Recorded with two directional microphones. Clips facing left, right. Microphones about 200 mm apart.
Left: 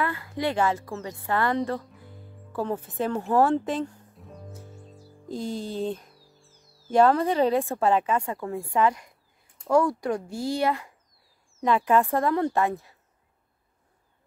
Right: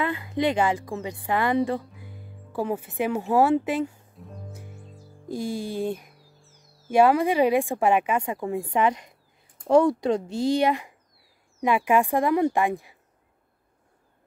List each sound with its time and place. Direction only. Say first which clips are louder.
0.0 s speech: right 3 dB; 20° right (ahead or behind)
2.0 s music: right 2 dB; 10° right (ahead or behind)
4.5 s music: right 1 dB; 10° right (ahead or behind)
5.3 s speech: right 2 dB; 10° right (ahead or behind)